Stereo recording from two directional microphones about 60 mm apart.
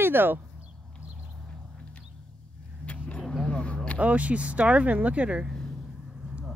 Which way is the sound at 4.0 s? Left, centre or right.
Right.